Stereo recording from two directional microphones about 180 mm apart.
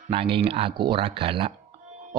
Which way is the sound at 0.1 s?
30° right (ahead or behind).